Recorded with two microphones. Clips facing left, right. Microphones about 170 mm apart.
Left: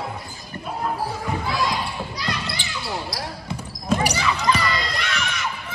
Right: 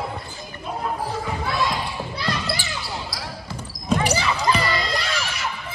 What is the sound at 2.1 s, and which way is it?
Basketball bounce, 35° right (ahead or behind).